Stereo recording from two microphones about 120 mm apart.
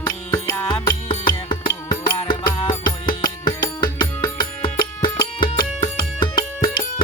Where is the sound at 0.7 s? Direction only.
40° left (ahead or behind).